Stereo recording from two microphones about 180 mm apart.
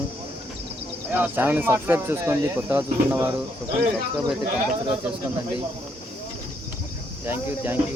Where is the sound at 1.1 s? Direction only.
10° right (ahead or behind).